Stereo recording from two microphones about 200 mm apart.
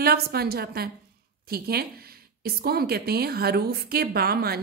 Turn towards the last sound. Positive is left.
turn(degrees=-50)  # may be behind; listen again after turning